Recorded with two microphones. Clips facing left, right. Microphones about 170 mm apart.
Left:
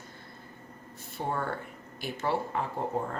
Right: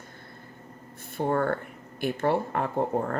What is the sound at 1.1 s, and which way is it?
Speech, 55° right (ahead or behind).